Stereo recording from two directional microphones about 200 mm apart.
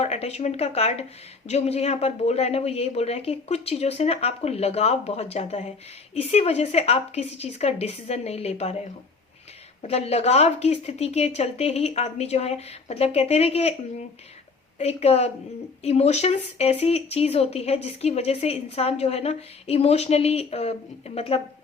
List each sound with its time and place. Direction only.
0.0 s speech: 30° left (ahead or behind)
9.8 s speech: 30° left (ahead or behind)
14.8 s speech: 30° left (ahead or behind)